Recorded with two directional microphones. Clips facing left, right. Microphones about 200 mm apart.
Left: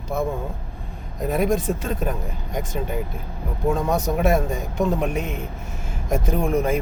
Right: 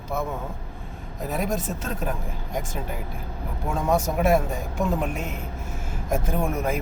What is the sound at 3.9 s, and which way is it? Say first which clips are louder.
Speech: right 3 dB; 5° right (ahead or behind).